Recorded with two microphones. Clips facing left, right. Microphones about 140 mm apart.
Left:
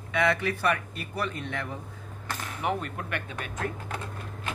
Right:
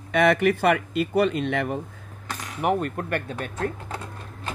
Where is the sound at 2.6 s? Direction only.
50° right (ahead or behind); by 4.0 s 30° right (ahead or behind).